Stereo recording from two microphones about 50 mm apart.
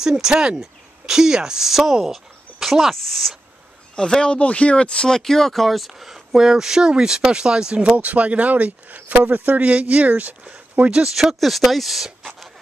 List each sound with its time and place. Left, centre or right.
0.0 s speech: centre
4.2 s speech: left; by 11.1 s right
11.1 s speech: centre